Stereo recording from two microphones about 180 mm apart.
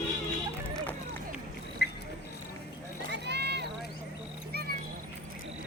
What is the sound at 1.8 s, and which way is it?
Cricket, 65° left (ahead or behind).